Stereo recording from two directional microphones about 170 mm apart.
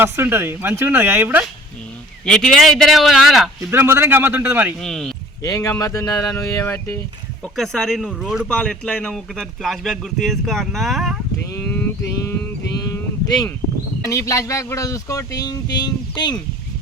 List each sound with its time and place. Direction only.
0.0 s speech: 15° right (ahead or behind)
2.2 s speech: 5° left (ahead or behind)
3.7 s speech: 15° right (ahead or behind)
4.8 s speech: centre (ahead or behind)
5.4 s speech: 20° left (ahead or behind)
7.4 s speech: centre (ahead or behind)
11.6 s a sound: 10° left (ahead or behind)
14.0 s speech: 20° left (ahead or behind)